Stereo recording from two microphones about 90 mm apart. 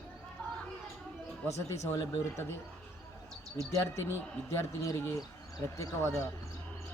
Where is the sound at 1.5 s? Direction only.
35° left (ahead or behind).